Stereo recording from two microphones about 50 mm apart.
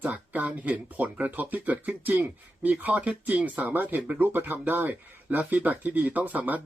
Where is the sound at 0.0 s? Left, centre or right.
Right.